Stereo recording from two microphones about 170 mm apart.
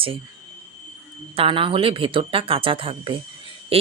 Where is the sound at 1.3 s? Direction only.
30° right (ahead or behind).